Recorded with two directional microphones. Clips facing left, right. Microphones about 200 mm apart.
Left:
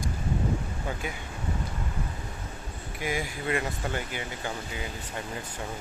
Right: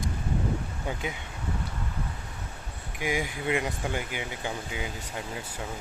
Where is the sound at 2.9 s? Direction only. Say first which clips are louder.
Right 2 dB; 15° right (ahead or behind).